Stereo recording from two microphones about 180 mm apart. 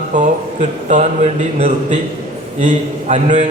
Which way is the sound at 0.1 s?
40° right (ahead or behind).